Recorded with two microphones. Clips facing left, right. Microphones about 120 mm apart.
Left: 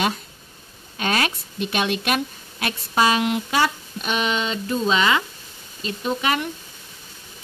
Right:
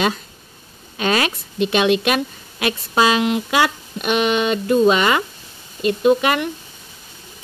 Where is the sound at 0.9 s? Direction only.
90° right; by 6.5 s 70° right (ahead or behind).